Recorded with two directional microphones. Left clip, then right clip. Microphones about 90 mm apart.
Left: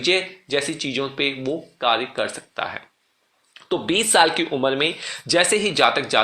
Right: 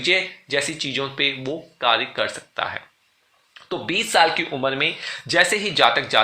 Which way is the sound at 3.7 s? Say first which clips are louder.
Left 2 dB; 60° left (ahead or behind).